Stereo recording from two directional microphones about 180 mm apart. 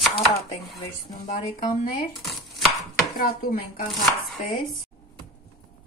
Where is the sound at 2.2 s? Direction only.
Centre (ahead or behind).